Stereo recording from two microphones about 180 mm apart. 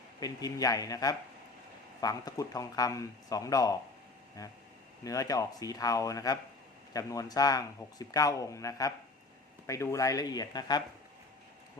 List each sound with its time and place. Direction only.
0.2 s speech: 20° left (ahead or behind)